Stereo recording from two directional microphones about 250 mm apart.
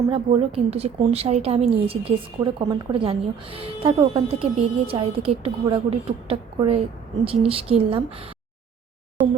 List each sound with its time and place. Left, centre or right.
0.1 s a woman's voice: right